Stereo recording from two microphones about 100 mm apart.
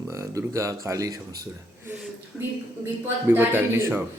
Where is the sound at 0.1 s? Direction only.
30° right (ahead or behind).